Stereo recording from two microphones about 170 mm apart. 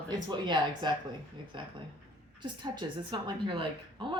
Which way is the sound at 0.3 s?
25° right (ahead or behind).